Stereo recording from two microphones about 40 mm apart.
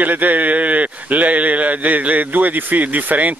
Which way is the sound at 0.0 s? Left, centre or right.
Right.